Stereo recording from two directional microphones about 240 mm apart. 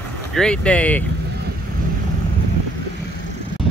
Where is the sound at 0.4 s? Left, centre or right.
Centre.